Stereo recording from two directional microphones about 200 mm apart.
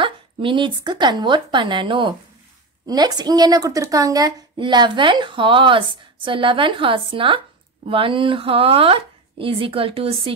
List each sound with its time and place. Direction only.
0.0 s a woman's voice: 25° right (ahead or behind)